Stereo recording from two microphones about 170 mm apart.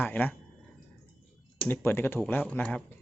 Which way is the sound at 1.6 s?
10° left (ahead or behind).